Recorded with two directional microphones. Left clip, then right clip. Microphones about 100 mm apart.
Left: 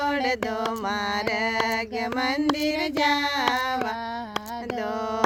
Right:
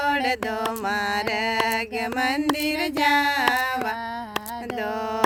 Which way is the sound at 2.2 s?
35° right (ahead or behind).